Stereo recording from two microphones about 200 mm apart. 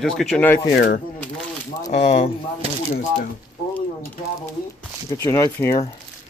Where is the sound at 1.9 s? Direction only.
35° left (ahead or behind).